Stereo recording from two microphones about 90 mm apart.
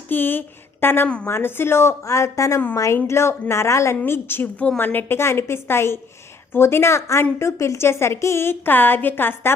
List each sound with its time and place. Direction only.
0.1 s a woman's voice: 25° left (ahead or behind)
1.0 s a woman's voice: 15° left (ahead or behind)
1.3 s a woman's voice: 25° left (ahead or behind)